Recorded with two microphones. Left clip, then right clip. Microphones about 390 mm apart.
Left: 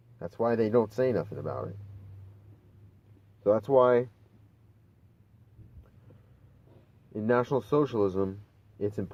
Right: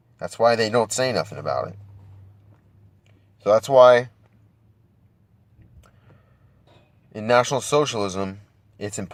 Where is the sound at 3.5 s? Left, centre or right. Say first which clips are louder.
Right 9 dB; centre.